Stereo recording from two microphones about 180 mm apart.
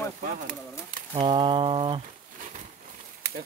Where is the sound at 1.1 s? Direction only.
30° right (ahead or behind).